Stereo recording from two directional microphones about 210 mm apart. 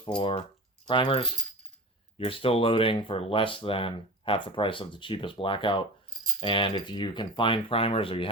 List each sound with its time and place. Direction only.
0.2 s speech: 25° left (ahead or behind)